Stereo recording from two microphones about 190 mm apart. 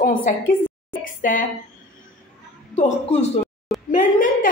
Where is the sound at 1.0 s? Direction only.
45° left (ahead or behind).